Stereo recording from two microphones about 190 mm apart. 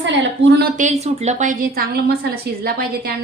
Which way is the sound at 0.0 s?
65° right (ahead or behind).